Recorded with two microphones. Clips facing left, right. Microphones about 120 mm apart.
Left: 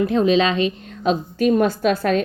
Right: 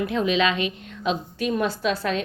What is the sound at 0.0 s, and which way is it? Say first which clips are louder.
A woman's voice: left 5 dB; 35° left (ahead or behind).